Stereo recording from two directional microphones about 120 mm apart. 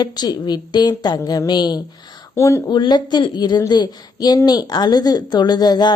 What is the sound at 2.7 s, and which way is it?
A woman's voice, 40° left (ahead or behind).